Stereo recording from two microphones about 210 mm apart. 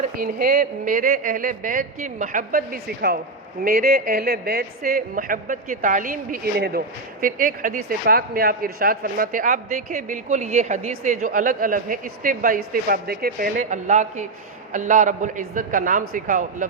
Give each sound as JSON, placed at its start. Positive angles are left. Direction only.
{"t": 0.2, "sound": "a man's voice", "side_deg": -45}